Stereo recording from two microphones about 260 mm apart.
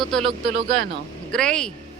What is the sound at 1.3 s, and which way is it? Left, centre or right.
Speech, centre.